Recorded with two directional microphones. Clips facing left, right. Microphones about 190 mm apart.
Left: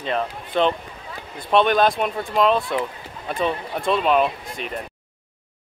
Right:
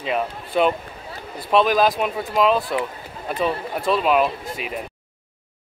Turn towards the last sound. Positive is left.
turn(degrees=-5)  # may be behind; listen again after turning